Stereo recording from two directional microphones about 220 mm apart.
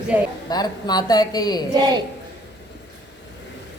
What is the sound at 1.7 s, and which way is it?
Speech, 20° right (ahead or behind).